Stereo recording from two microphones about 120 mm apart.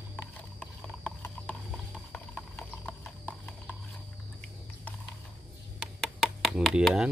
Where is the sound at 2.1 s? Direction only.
10° left (ahead or behind).